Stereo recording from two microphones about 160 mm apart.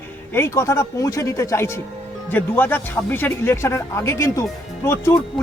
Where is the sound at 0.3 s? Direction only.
15° left (ahead or behind).